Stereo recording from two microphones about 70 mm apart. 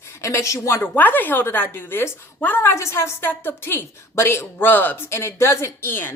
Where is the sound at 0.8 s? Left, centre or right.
Left.